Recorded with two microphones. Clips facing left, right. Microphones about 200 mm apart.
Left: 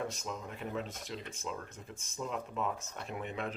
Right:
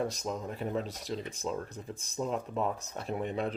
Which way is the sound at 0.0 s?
35° right (ahead or behind).